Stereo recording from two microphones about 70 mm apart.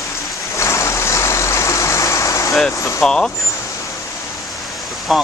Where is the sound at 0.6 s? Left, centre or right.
Left.